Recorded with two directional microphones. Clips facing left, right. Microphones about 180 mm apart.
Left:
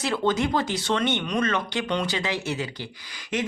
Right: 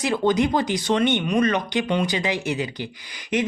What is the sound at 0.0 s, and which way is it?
Speech, 15° right (ahead or behind).